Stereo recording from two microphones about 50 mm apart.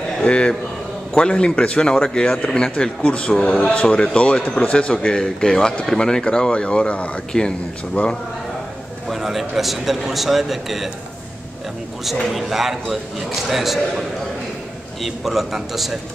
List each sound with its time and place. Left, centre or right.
0.2 s a man's voice: left
5.2 s speech: centre
7.3 s speech: left
7.9 s speech: left
9.1 s speech: centre
12.3 s speech: centre